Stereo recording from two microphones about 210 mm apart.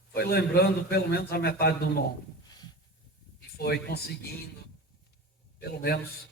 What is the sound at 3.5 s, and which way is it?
Speech, 50° left (ahead or behind).